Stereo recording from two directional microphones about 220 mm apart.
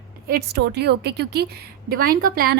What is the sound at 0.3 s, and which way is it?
A woman's voice, 45° right (ahead or behind).